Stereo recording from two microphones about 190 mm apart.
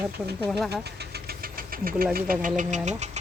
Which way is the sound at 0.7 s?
60° right (ahead or behind).